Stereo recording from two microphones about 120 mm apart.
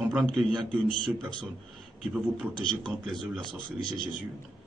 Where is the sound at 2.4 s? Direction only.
5° left (ahead or behind).